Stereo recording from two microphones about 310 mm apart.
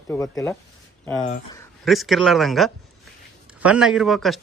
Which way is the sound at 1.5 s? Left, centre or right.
Centre.